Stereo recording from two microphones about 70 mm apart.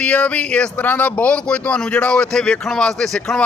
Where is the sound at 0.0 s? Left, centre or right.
Centre.